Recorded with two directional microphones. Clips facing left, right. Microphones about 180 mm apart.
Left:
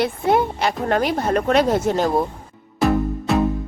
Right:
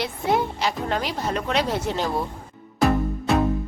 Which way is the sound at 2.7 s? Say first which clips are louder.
Left 2 dB; centre (ahead or behind).